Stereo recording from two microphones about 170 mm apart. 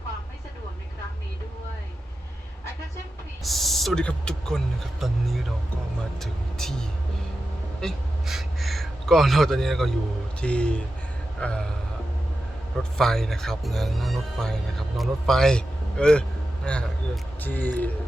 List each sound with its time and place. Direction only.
3.4 s speech: centre (ahead or behind)
6.1 s speech: centre (ahead or behind)
11.3 s a sound: 5° left (ahead or behind)
13.0 s speech: centre (ahead or behind)